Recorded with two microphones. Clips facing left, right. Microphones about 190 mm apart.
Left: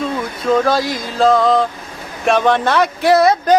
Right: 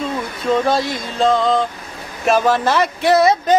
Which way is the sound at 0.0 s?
Centre (ahead or behind).